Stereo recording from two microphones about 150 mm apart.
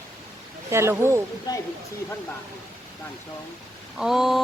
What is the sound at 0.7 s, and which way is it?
Speech, 15° right (ahead or behind).